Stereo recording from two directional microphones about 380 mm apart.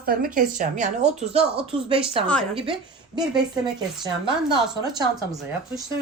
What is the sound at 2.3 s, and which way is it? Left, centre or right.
A woman's voice, centre.